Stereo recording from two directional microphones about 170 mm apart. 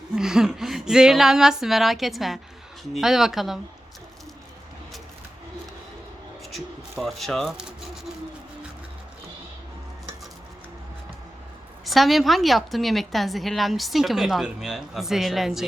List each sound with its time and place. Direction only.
0.2 s a woman's voice: 5° right (ahead or behind)
6.5 s a woman's voice: centre (ahead or behind)
11.9 s a woman's voice: centre (ahead or behind)